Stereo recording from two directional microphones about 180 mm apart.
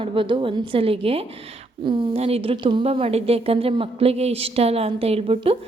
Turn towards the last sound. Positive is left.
turn(degrees=-35)  # may be behind; listen again after turning